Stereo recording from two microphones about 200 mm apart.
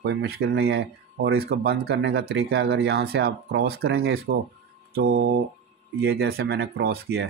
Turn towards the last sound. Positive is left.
turn(degrees=-50)  # may be behind; listen again after turning